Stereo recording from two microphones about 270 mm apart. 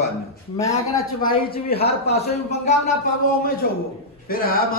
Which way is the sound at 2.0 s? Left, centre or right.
Left.